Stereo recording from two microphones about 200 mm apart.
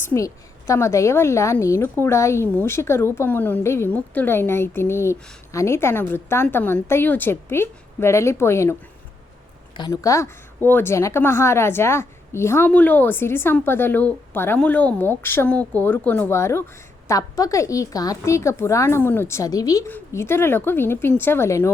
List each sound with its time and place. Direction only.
0.0 s a woman's voice: 10° left (ahead or behind)
9.7 s a woman's voice: 20° left (ahead or behind)